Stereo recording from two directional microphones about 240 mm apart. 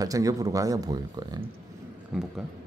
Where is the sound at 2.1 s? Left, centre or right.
Centre.